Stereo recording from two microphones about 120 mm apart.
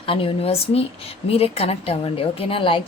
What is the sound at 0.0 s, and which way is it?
A woman's voice, 50° left (ahead or behind).